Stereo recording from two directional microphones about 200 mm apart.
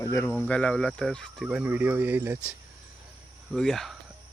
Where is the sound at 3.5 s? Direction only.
Centre (ahead or behind).